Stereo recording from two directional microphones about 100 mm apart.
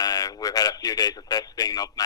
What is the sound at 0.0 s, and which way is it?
Speech, 40° left (ahead or behind).